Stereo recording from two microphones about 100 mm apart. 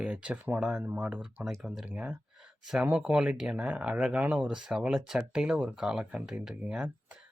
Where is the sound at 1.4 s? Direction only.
Centre (ahead or behind).